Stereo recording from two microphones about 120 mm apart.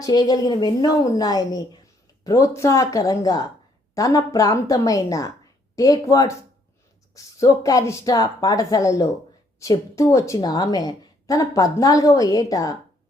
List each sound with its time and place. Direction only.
0.0 s a woman's voice: 35° left (ahead or behind)